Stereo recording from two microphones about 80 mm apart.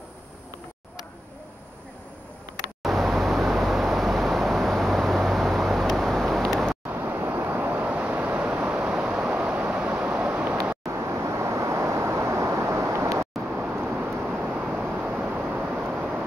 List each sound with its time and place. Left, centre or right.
2.8 s vehicle: centre
6.9 s vehicle: right
10.9 s vehicle: right
13.5 s vehicle: centre